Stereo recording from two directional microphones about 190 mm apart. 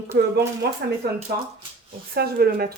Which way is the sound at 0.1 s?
60° right (ahead or behind).